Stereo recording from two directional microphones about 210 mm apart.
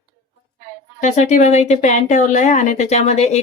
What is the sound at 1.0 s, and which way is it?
Speech, 35° left (ahead or behind).